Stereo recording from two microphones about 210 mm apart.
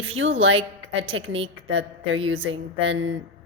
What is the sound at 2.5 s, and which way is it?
Speech, 70° right (ahead or behind).